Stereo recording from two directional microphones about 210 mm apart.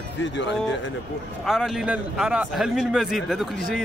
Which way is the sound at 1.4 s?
Centre (ahead or behind).